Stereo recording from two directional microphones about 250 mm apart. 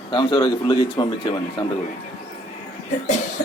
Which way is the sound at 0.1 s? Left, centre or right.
Centre.